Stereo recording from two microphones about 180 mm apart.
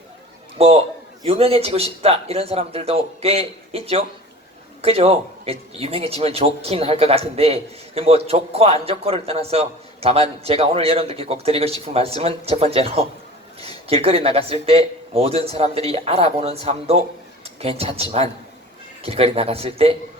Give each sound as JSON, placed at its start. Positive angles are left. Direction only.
{"t": 0.6, "sound": "a man's voice", "side_deg": -35}